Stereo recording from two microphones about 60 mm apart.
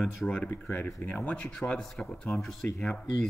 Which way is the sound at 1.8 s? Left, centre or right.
Centre.